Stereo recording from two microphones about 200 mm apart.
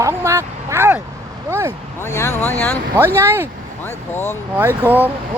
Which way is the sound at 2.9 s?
10° right (ahead or behind).